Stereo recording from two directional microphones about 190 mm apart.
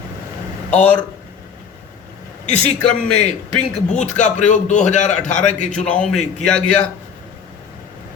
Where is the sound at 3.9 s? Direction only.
40° left (ahead or behind).